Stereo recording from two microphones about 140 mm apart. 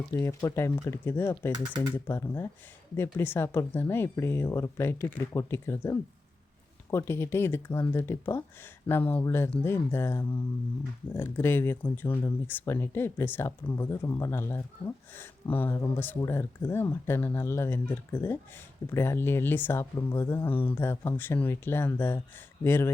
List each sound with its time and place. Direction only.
0.1 s speech: 20° left (ahead or behind)